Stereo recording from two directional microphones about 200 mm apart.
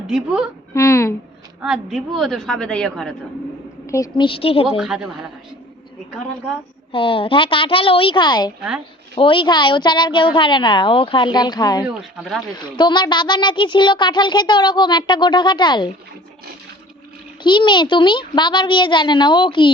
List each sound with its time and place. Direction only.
0.1 s a woman's voice: 5° right (ahead or behind)
0.7 s speech: 15° left (ahead or behind)
1.6 s a woman's voice: centre (ahead or behind)
3.8 s a child's voice: 15° left (ahead or behind)
4.8 s a woman's voice: 5° right (ahead or behind)
6.9 s a child's voice: 25° left (ahead or behind)
17.4 s a child's voice: 25° left (ahead or behind)